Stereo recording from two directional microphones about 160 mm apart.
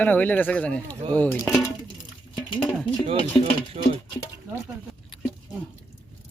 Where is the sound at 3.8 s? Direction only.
45° right (ahead or behind).